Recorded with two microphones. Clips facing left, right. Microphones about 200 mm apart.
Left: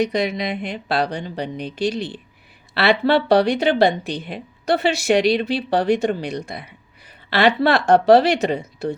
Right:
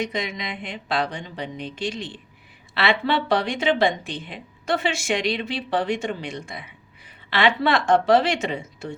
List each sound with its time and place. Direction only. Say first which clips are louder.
0.0 s speech: left 7 dB; 35° left (ahead or behind)